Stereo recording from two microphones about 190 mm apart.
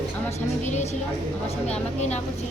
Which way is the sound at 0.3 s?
35° left (ahead or behind).